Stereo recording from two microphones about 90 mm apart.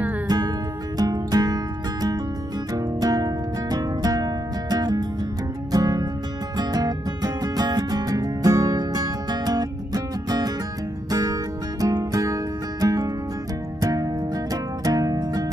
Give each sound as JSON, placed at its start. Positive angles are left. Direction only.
{"t": 0.9, "sound": "music", "side_deg": -45}